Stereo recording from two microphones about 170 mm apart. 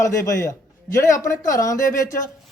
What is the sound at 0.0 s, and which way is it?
A man's voice, 15° left (ahead or behind).